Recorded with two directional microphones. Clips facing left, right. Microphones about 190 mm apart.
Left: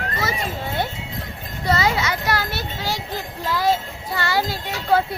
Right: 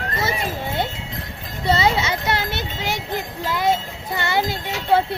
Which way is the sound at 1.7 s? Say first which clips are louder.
Right 2 dB; 25° right (ahead or behind).